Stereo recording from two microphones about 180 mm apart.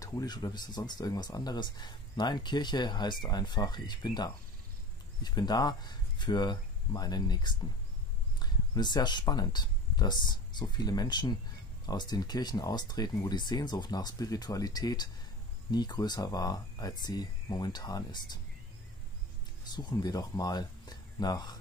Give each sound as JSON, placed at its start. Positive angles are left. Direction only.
{"t": 0.0, "sound": "speech", "side_deg": 20}
{"t": 19.7, "sound": "speech", "side_deg": 25}